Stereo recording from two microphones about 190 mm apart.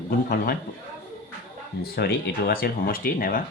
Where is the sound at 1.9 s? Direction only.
55° left (ahead or behind).